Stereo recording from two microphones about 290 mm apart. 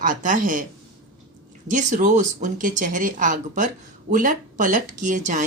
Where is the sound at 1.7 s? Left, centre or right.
Right.